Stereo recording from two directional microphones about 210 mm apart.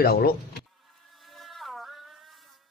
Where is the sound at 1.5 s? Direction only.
Centre (ahead or behind).